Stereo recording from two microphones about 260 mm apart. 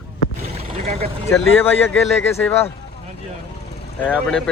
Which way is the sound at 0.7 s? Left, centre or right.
Right.